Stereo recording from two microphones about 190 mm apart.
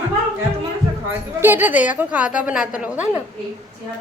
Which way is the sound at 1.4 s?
10° right (ahead or behind).